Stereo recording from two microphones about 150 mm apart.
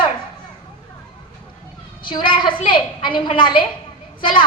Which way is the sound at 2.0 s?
35° left (ahead or behind).